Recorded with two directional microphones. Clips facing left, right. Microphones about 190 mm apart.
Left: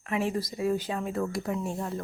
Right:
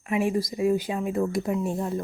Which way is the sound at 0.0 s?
15° right (ahead or behind).